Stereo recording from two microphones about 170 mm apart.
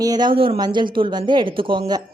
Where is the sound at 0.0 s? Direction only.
25° right (ahead or behind).